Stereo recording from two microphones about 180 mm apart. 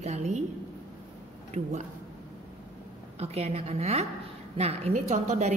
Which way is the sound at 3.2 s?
35° right (ahead or behind).